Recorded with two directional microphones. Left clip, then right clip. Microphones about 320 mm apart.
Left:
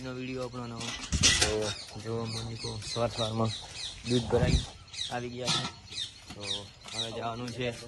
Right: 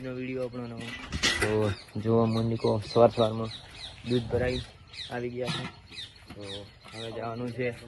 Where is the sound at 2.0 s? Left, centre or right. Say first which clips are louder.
Right 11 dB; right.